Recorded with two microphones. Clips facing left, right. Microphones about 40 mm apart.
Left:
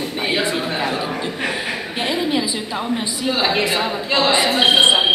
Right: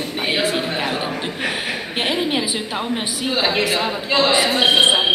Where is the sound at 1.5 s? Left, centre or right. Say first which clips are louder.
Even; right.